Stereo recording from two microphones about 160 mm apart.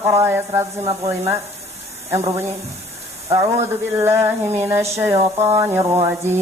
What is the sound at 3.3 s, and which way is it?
A man's voice, 20° right (ahead or behind).